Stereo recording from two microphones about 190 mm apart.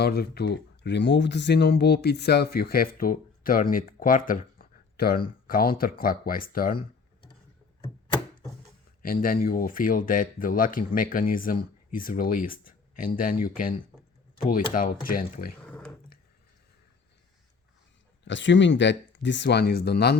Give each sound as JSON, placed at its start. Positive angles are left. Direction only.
{"t": 0.0, "sound": "speech", "side_deg": 55}
{"t": 6.7, "sound": "computer keyboard", "side_deg": 25}
{"t": 9.0, "sound": "speech", "side_deg": 50}
{"t": 15.6, "sound": "a sound", "side_deg": 5}
{"t": 18.3, "sound": "speech", "side_deg": 75}